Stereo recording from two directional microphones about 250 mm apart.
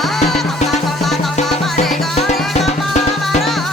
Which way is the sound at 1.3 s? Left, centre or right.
Left.